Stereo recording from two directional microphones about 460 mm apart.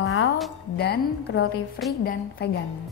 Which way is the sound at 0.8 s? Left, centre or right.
Left.